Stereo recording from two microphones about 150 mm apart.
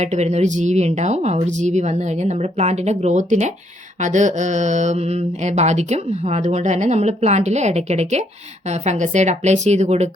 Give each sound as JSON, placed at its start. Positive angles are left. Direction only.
{"t": 0.0, "sound": "mantra", "side_deg": -50}